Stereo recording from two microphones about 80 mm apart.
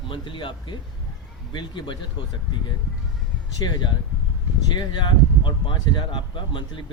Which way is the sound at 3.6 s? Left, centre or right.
Left.